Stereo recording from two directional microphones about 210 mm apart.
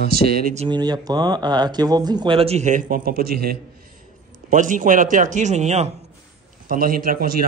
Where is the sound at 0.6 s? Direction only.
20° right (ahead or behind).